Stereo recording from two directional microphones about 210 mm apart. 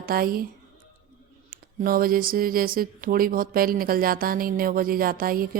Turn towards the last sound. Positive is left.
turn(degrees=-45)  # may be behind; listen again after turning